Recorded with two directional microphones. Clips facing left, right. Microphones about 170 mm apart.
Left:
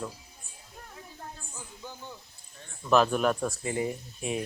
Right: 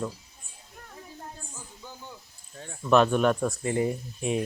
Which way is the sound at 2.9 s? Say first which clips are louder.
Right 3 dB; centre (ahead or behind).